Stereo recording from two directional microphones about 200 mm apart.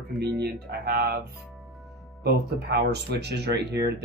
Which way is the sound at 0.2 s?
55° right (ahead or behind).